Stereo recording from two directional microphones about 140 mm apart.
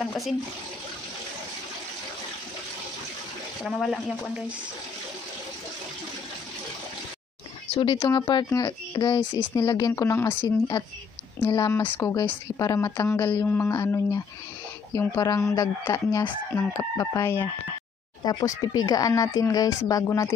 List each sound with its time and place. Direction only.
0.0 s speech: centre (ahead or behind)
3.6 s speech: centre (ahead or behind)
7.7 s speech: 30° left (ahead or behind)
18.2 s speech: 30° left (ahead or behind)